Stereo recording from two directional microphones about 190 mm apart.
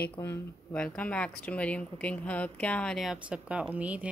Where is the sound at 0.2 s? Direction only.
10° left (ahead or behind).